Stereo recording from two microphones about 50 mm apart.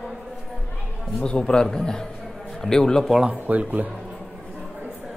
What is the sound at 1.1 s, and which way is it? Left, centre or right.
A man's voice, centre.